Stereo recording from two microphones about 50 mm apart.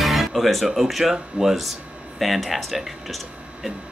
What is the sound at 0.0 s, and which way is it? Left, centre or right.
Music, centre.